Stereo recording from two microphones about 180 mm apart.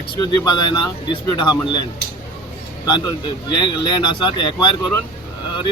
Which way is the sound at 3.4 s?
25° left (ahead or behind).